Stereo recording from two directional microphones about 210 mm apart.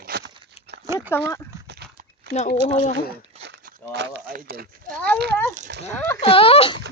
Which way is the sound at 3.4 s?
55° right (ahead or behind).